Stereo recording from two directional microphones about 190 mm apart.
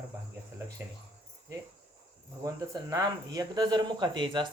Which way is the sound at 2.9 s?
20° right (ahead or behind).